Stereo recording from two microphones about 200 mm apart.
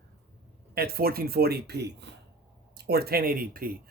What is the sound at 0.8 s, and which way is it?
Speech, 50° right (ahead or behind).